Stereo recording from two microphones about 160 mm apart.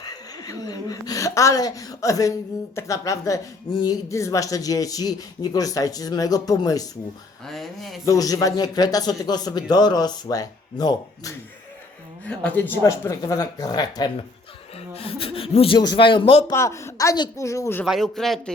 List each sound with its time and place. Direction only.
0.0 s speech: 25° left (ahead or behind)
7.4 s speech: centre (ahead or behind)
8.0 s speech: 20° left (ahead or behind)
12.2 s speech: 10° left (ahead or behind); by 14.1 s 25° left (ahead or behind)
14.9 s speech: 35° left (ahead or behind)
16.5 s speech: 20° left (ahead or behind)
17.8 s speech: centre (ahead or behind)